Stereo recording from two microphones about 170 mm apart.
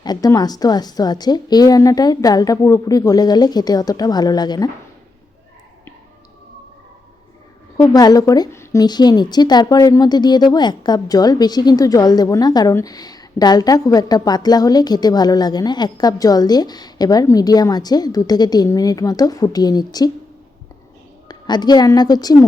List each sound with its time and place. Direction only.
0.0 s a woman's voice: 25° left (ahead or behind)
7.8 s a woman's voice: 20° left (ahead or behind)
21.2 s a woman's voice: 25° left (ahead or behind)